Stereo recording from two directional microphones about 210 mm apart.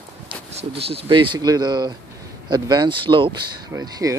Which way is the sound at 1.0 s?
25° right (ahead or behind).